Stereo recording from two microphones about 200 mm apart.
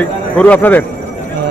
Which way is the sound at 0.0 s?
10° left (ahead or behind).